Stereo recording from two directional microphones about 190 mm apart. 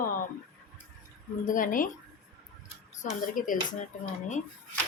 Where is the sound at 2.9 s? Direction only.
40° left (ahead or behind).